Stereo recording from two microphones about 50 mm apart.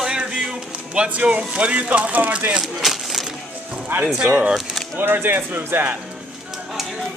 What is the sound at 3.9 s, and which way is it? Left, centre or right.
Speech, right.